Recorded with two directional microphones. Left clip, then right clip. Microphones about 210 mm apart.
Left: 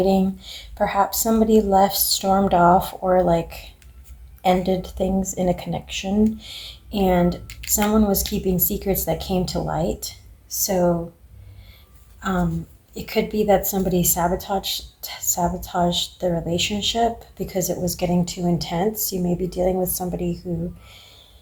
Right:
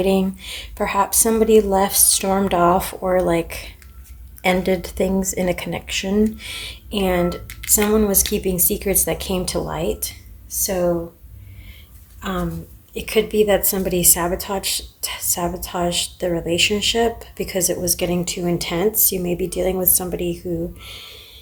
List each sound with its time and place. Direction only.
0.0 s speech: 35° right (ahead or behind)
12.9 s speech: 35° right (ahead or behind)